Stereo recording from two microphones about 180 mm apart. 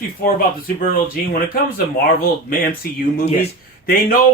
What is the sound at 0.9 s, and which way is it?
Speech, 55° left (ahead or behind).